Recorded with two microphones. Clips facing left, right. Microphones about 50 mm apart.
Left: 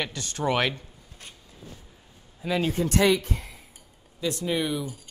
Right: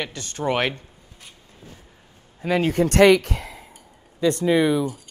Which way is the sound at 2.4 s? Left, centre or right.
Right.